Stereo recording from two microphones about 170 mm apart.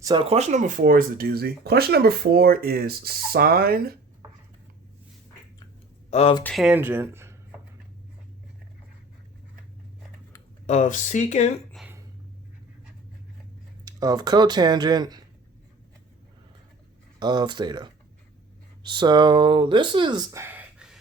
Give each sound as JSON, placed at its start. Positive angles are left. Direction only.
{"t": 0.0, "sound": "speech", "side_deg": -25}
{"t": 6.1, "sound": "speech", "side_deg": 40}
{"t": 6.4, "sound": "speech", "side_deg": 0}
{"t": 6.7, "sound": "speech", "side_deg": -10}
{"t": 10.7, "sound": "speech", "side_deg": 45}
{"t": 11.8, "sound": "a sound", "side_deg": 0}
{"t": 13.8, "sound": "speech", "side_deg": -20}
{"t": 17.2, "sound": "speech", "side_deg": -25}
{"t": 20.4, "sound": "a sound", "side_deg": -10}